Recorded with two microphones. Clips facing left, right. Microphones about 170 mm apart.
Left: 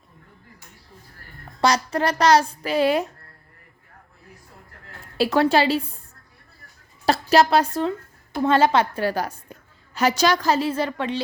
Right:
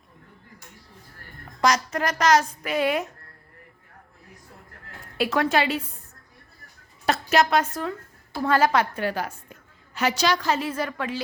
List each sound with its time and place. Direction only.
1.6 s a woman's voice: 30° left (ahead or behind)
5.1 s a woman's voice: 30° left (ahead or behind)
7.0 s a woman's voice: 35° left (ahead or behind)